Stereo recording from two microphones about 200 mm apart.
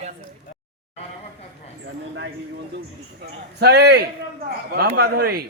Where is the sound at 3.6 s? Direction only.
55° right (ahead or behind).